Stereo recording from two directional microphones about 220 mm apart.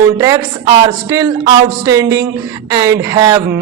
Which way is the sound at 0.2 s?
15° right (ahead or behind).